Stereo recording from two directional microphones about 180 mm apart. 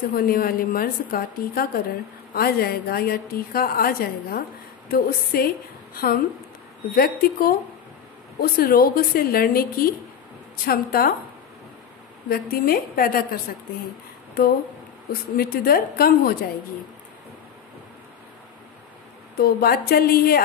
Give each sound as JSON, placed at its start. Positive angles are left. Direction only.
{"t": 0.1, "sound": "a woman's voice", "side_deg": 55}
{"t": 12.3, "sound": "a woman's voice", "side_deg": 55}
{"t": 19.3, "sound": "a woman's voice", "side_deg": 60}